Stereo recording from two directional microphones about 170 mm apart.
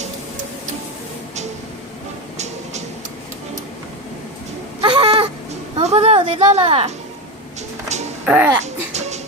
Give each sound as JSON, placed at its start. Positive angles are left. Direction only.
{"t": 4.8, "sound": "cat", "side_deg": -30}
{"t": 5.7, "sound": "a sound", "side_deg": -40}
{"t": 8.2, "sound": "a child's voice", "side_deg": -10}
{"t": 8.6, "sound": "babbling", "side_deg": -40}